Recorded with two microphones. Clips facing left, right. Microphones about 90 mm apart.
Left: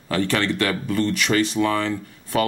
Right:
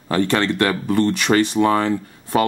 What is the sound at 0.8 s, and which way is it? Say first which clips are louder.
Speech: right 4 dB; 45° right (ahead or behind).